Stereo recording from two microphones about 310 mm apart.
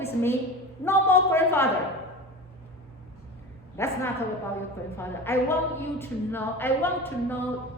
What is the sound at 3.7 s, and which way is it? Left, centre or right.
A woman's voice, centre.